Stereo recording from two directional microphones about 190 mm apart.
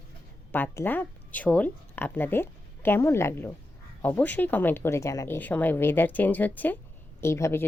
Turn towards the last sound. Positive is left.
turn(degrees=15)  # may be behind; listen again after turning